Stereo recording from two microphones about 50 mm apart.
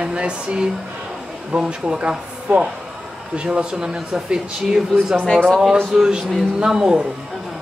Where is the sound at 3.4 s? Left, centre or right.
Right.